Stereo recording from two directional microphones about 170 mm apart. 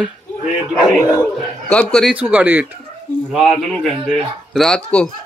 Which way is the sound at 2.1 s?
10° right (ahead or behind).